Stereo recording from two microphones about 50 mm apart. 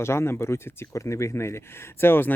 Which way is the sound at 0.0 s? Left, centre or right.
Left.